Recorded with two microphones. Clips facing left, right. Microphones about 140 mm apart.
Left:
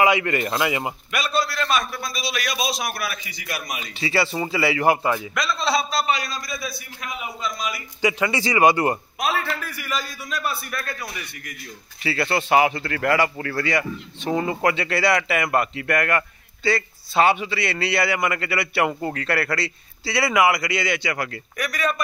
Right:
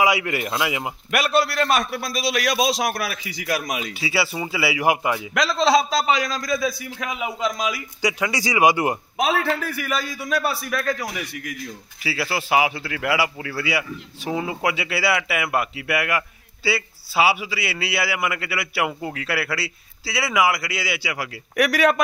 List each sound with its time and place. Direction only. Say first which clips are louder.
0.0 s speech: left 1 dB; 10° right (ahead or behind)
1.1 s a man's voice: right 5 dB; 75° right (ahead or behind); by 3.8 s 90° right
4.0 s speech: left 4 dB; 5° right (ahead or behind)
5.3 s a man's voice: right 5 dB; 90° right
8.0 s a man's voice: left 2 dB; centre (ahead or behind)
9.2 s a man's voice: right 5 dB; 90° right
12.0 s speech: left 3 dB; 5° right (ahead or behind)
21.5 s a man's voice: right 7 dB; 85° right